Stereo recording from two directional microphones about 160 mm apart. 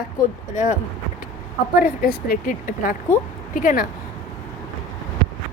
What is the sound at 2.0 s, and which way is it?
Speech, 60° left (ahead or behind).